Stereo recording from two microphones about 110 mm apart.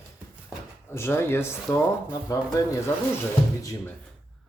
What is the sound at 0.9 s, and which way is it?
Speech, 20° left (ahead or behind).